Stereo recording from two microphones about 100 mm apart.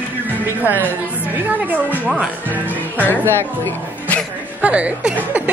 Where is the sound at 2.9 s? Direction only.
20° left (ahead or behind).